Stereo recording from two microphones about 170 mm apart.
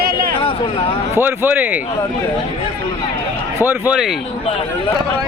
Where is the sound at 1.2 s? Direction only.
10° right (ahead or behind).